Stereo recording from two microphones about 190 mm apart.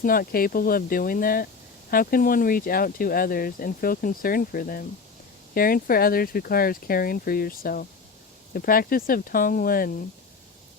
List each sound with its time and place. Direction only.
0.0 s speech: 50° left (ahead or behind)